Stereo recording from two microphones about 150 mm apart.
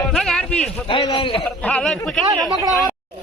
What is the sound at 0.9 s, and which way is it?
Speech, 30° left (ahead or behind).